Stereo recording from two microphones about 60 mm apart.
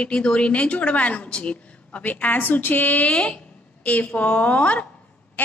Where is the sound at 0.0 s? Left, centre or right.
Centre.